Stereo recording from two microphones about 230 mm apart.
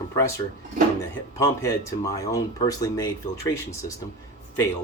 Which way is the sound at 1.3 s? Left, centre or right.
Centre.